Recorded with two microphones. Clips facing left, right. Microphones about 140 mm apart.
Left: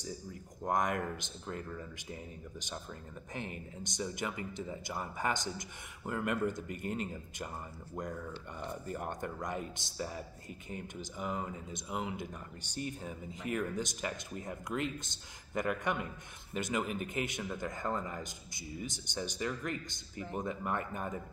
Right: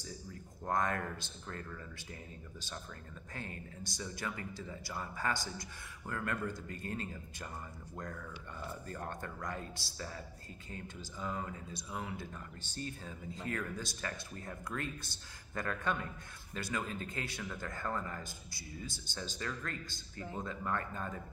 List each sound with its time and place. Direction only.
0.7 s speech: 15° left (ahead or behind)
3.3 s speech: 20° left (ahead or behind)